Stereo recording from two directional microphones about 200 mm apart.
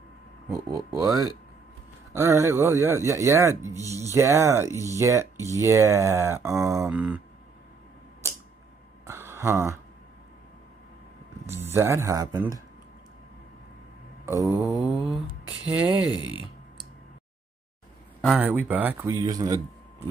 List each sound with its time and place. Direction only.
0.5 s speech: 15° right (ahead or behind)
9.0 s a sound: 10° right (ahead or behind)
11.4 s speech: 10° right (ahead or behind)
14.6 s mantra: centre (ahead or behind)
15.8 s speech: 20° left (ahead or behind)
18.2 s speech: 5° right (ahead or behind)